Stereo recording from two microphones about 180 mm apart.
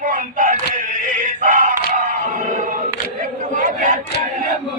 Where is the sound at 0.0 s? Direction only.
50° right (ahead or behind).